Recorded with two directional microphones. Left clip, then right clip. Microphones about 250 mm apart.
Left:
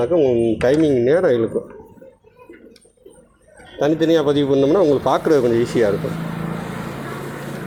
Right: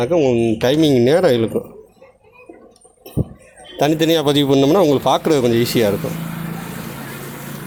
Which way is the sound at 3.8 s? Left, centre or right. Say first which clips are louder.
Right 1 dB; right.